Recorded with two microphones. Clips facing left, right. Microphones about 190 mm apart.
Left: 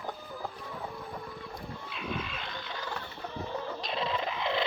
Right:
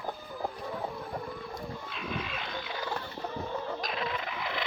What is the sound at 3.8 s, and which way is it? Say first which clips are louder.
Dog: left 2 dB; 30° left (ahead or behind).